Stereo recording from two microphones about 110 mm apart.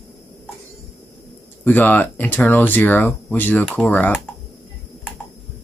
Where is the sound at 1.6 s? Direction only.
15° left (ahead or behind).